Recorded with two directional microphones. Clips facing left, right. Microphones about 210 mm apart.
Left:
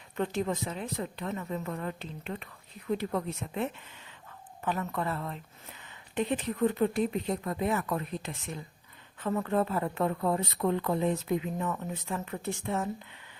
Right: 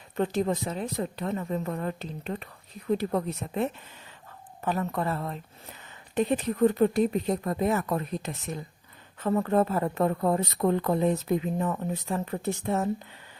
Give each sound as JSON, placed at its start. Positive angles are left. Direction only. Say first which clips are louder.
{"t": 0.2, "sound": "speech", "louder": "right 4 dB", "side_deg": -35}